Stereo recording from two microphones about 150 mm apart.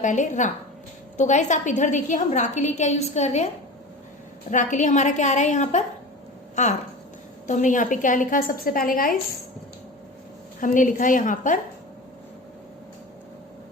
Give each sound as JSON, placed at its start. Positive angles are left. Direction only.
{"t": 0.0, "sound": "a woman's voice", "side_deg": 55}
{"t": 4.5, "sound": "a woman's voice", "side_deg": 55}
{"t": 10.6, "sound": "a woman's voice", "side_deg": 60}